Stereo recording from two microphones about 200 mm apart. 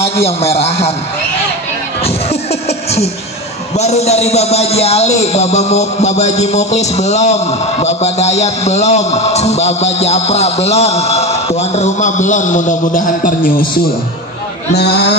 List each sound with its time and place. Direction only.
0.2 s a man's voice: 30° left (ahead or behind)
3.7 s a man's voice: 35° left (ahead or behind)
14.7 s speech: 55° left (ahead or behind)